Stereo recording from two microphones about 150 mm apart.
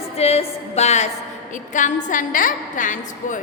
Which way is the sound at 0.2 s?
45° left (ahead or behind).